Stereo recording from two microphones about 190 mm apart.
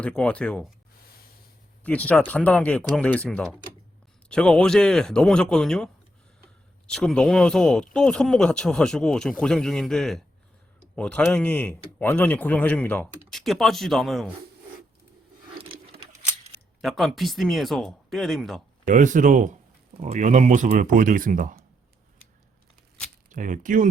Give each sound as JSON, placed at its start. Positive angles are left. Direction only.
{"t": 0.0, "sound": "speech", "side_deg": 5}
{"t": 1.8, "sound": "a man's voice", "side_deg": 5}
{"t": 16.8, "sound": "speech", "side_deg": 0}
{"t": 18.9, "sound": "speech", "side_deg": -40}
{"t": 23.3, "sound": "speech", "side_deg": -45}